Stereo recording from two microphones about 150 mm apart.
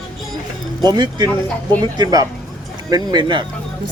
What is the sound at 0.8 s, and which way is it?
Speech, 30° right (ahead or behind).